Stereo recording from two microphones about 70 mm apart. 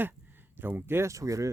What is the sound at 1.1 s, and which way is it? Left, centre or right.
Speech, right.